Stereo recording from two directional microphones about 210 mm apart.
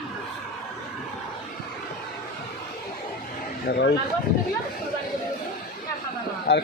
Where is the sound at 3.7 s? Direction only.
55° left (ahead or behind).